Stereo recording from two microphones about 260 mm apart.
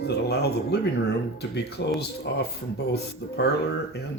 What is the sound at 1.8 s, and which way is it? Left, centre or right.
Speech, left.